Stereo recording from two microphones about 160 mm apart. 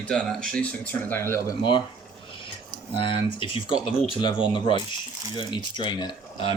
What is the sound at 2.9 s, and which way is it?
Speech, 30° left (ahead or behind).